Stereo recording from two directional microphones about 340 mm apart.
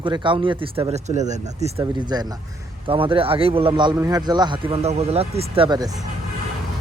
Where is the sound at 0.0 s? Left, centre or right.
Centre.